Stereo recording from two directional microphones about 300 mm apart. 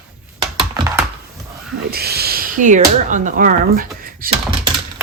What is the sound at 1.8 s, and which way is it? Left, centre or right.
Speech, right.